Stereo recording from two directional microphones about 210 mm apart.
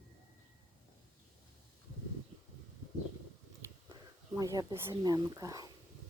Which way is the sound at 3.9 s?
15° right (ahead or behind).